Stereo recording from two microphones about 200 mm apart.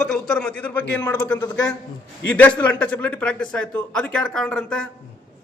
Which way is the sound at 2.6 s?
5° left (ahead or behind).